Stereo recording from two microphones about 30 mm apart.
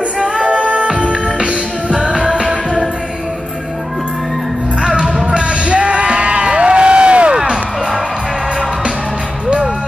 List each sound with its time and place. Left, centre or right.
0.2 s music: right
2.4 s music: centre
5.3 s a sound: right